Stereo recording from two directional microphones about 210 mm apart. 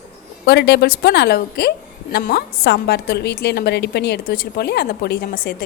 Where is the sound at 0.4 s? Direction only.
55° left (ahead or behind).